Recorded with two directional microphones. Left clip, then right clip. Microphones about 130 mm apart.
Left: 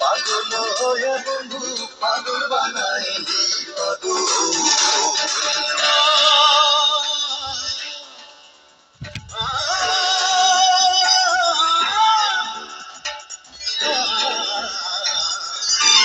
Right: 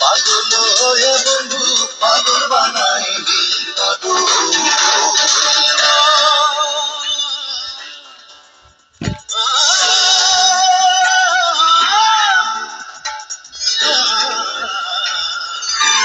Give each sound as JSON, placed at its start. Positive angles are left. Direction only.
{"t": 0.0, "sound": "music", "side_deg": -35}
{"t": 6.5, "sound": "music", "side_deg": 10}
{"t": 7.0, "sound": "music", "side_deg": 30}
{"t": 9.3, "sound": "music", "side_deg": -55}
{"t": 10.5, "sound": "music", "side_deg": -5}
{"t": 13.6, "sound": "music", "side_deg": -30}
{"t": 14.5, "sound": "music", "side_deg": 0}
{"t": 14.8, "sound": "music", "side_deg": 20}